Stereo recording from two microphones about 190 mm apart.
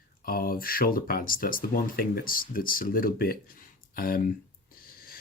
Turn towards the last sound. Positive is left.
turn(degrees=50)  # may be behind; listen again after turning